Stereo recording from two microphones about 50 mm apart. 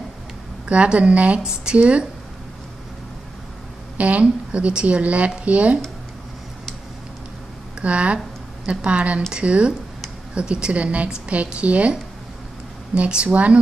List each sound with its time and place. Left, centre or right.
0.7 s a woman's voice: right
4.0 s a woman's voice: right
7.8 s a woman's voice: right
12.9 s a woman's voice: right